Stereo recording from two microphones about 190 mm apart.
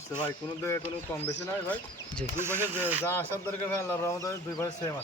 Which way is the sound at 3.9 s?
15° left (ahead or behind).